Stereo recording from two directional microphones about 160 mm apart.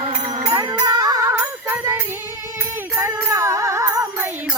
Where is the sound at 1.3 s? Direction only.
10° right (ahead or behind).